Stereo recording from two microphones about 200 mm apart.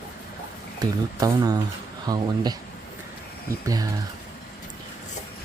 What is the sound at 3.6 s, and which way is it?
Speech, 20° right (ahead or behind).